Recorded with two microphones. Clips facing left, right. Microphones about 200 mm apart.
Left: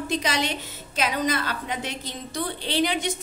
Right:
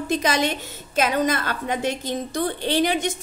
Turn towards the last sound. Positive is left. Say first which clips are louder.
# right 3 dB
turn(degrees=-45)  # may be behind; listen again after turning